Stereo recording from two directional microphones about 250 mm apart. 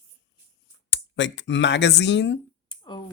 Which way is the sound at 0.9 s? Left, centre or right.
Left.